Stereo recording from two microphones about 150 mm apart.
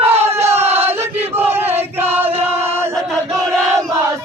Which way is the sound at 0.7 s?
15° right (ahead or behind).